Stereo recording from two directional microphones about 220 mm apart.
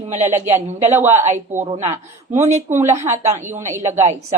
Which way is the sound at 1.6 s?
30° right (ahead or behind).